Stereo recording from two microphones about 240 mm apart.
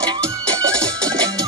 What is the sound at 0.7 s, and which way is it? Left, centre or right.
Music, centre.